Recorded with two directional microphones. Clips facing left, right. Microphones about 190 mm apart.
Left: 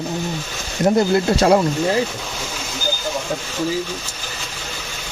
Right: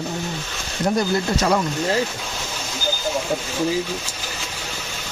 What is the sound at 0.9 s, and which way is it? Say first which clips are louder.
Speech: left 4 dB; 25° left (ahead or behind).